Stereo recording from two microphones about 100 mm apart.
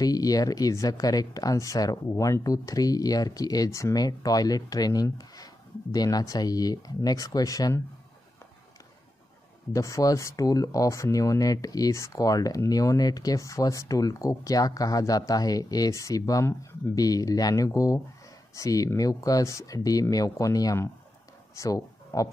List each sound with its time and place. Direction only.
0.0 s speech: 40° left (ahead or behind)
9.7 s speech: 30° left (ahead or behind)